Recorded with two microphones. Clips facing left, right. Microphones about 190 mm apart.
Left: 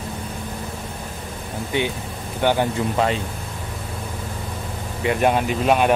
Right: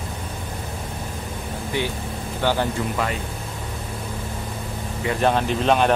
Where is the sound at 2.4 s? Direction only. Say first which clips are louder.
Left 3 dB; 15° left (ahead or behind).